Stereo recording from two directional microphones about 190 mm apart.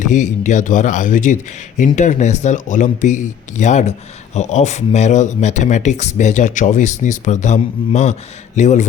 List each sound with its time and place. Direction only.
0.0 s speech: 40° left (ahead or behind)